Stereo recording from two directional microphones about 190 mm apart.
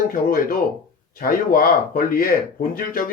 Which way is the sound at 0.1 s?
45° left (ahead or behind).